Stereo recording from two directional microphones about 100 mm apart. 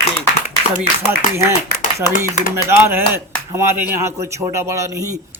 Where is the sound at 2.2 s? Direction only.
25° right (ahead or behind).